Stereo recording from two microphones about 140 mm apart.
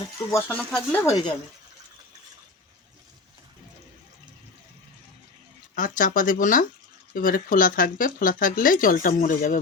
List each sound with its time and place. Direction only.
0.3 s speech: 15° left (ahead or behind)
5.7 s speech: 70° left (ahead or behind)